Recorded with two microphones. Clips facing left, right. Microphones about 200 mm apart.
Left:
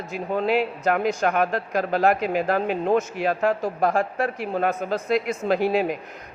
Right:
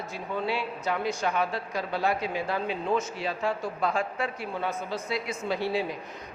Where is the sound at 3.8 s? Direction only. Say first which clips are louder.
Left 6 dB; 50° left (ahead or behind).